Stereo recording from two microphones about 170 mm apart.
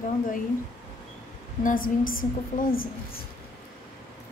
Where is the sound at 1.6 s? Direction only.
55° left (ahead or behind).